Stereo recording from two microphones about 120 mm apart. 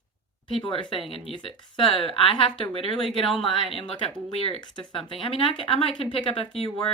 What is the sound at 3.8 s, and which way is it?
Speech, 50° left (ahead or behind).